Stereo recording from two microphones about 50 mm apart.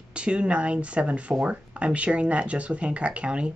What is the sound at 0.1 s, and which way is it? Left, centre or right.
Speech, right.